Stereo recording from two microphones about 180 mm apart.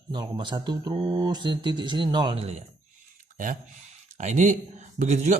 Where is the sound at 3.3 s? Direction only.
45° right (ahead or behind).